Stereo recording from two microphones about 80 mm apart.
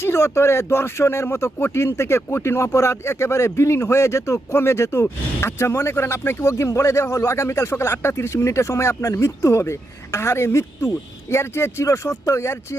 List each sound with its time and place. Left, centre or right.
0.0 s speech: left